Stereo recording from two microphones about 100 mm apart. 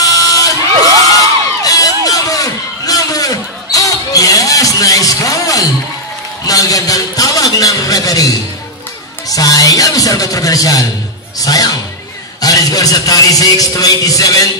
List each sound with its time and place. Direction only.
0.0 s crowd: 35° left (ahead or behind)
6.4 s music: 35° left (ahead or behind)
9.3 s a man's voice: 35° left (ahead or behind)